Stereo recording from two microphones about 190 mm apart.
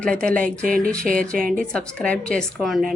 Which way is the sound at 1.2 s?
5° left (ahead or behind).